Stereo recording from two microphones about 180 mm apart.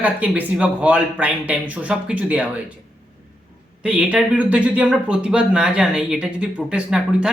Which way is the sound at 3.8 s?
5° right (ahead or behind).